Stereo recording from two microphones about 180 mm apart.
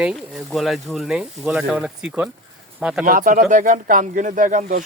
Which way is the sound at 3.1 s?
50° right (ahead or behind).